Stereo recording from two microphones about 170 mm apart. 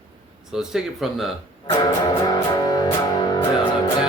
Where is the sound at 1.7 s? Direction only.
20° left (ahead or behind).